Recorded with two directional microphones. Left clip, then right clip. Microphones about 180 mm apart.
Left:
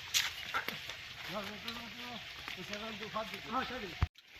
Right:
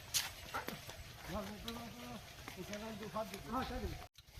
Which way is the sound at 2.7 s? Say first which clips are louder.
Left 3 dB; 15° right (ahead or behind).